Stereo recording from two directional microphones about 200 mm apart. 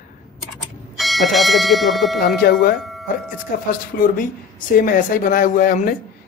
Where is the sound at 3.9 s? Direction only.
50° left (ahead or behind).